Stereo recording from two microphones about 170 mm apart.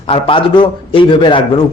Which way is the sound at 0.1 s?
30° left (ahead or behind).